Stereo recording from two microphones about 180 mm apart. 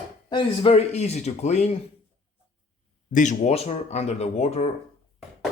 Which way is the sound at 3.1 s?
45° left (ahead or behind).